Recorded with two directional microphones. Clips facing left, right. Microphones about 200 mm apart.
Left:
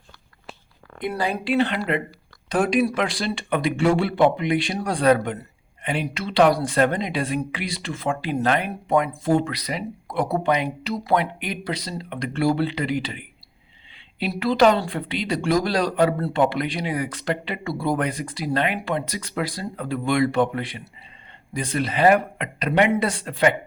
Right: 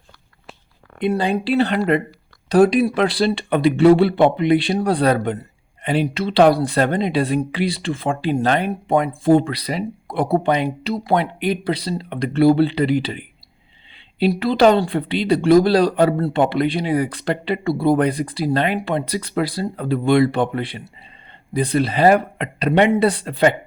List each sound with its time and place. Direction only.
0.9 s speech: 25° right (ahead or behind)